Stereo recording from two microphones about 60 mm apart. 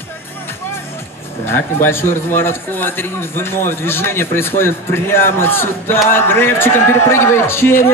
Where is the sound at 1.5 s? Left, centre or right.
Left.